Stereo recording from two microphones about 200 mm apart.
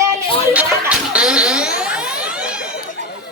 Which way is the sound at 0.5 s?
5° right (ahead or behind).